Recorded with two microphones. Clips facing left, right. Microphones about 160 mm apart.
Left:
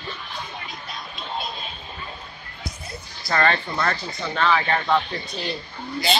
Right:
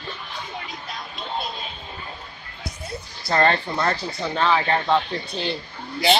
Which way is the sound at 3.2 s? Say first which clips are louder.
Right 2 dB; 25° right (ahead or behind).